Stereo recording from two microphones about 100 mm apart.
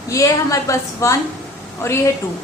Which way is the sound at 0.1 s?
30° left (ahead or behind).